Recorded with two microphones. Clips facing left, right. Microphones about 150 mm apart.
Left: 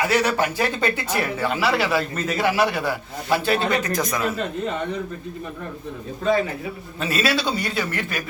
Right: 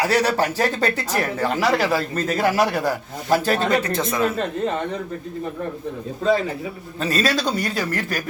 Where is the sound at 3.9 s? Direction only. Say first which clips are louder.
Right 2 dB; 25° right (ahead or behind).